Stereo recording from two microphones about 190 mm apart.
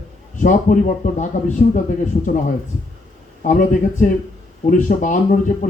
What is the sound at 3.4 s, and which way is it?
Speech, 45° left (ahead or behind).